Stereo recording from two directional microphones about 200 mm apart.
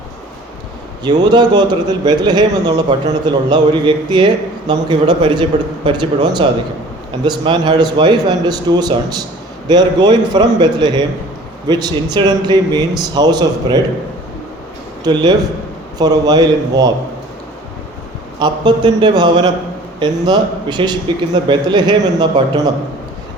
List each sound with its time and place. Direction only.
1.0 s a man's voice: 20° right (ahead or behind)
15.0 s a man's voice: 20° right (ahead or behind)
18.3 s a man's voice: 20° right (ahead or behind)